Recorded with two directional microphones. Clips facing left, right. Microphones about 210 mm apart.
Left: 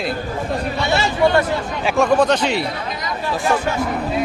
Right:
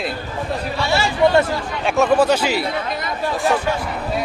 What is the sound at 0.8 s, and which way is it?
Speech, 20° left (ahead or behind).